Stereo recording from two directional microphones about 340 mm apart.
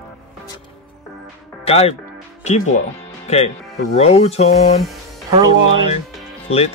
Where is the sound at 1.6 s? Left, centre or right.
Centre.